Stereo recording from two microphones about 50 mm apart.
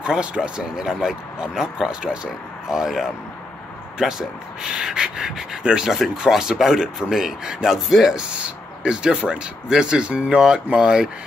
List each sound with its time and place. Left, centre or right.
0.0 s speech: centre
4.2 s speech: centre
5.6 s speech: right
5.9 s speech: centre
8.3 s speech: right